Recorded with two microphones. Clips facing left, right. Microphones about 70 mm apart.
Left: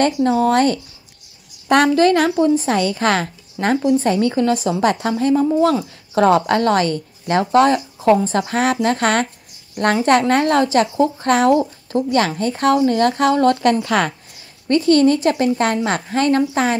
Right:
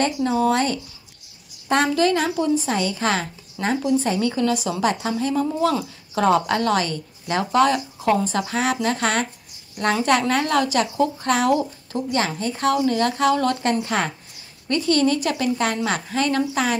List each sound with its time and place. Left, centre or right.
0.0 s a woman's voice: left
2.0 s a woman's voice: left
5.3 s a woman's voice: left
13.6 s a woman's voice: left
14.7 s a woman's voice: left